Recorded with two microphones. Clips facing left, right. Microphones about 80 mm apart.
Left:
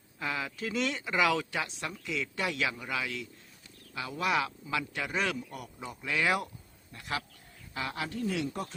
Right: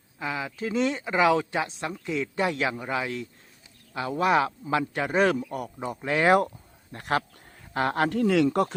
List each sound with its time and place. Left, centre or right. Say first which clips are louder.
0.2 s a man's voice: right 4 dB; centre; by 8.7 s right